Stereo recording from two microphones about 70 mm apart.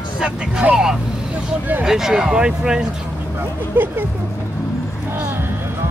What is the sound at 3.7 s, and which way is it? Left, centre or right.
Speech, right.